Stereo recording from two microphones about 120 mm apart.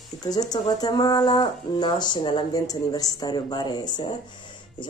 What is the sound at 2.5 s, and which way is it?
Speech, 30° left (ahead or behind).